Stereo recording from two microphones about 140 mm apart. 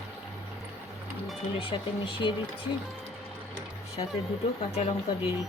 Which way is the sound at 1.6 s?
40° left (ahead or behind).